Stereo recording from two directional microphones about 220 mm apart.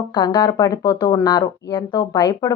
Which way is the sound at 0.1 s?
20° left (ahead or behind).